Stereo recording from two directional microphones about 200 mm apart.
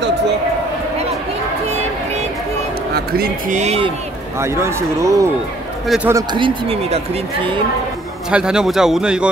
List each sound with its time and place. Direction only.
2.9 s speech: 50° right (ahead or behind); by 3.9 s 30° right (ahead or behind)
4.4 s speech: 15° right (ahead or behind)
8.3 s a man's voice: 5° right (ahead or behind)